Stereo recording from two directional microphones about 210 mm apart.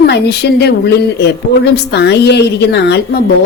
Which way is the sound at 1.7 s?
55° left (ahead or behind).